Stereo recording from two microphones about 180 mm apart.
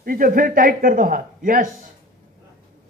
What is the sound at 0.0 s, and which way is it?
A man's voice, 50° right (ahead or behind).